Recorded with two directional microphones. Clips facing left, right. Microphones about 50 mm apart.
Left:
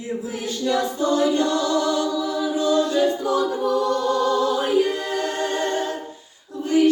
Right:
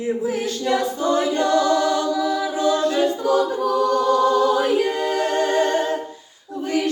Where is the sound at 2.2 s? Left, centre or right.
Right.